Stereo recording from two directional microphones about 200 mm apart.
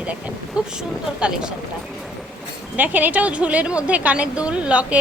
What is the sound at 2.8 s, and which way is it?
A woman's voice, 10° right (ahead or behind).